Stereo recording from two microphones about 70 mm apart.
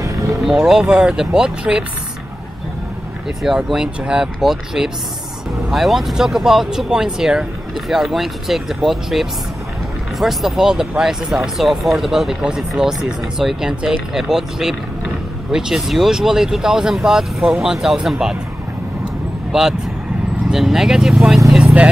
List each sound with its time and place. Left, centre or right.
0.0 s vehicle: right
0.5 s speech: centre
3.4 s speech: centre
19.5 s speech: centre
21.5 s vehicle: centre